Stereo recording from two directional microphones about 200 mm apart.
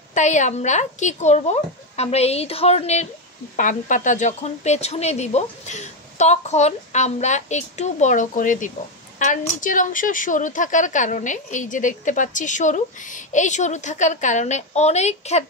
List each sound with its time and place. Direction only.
0.1 s speech: 35° left (ahead or behind)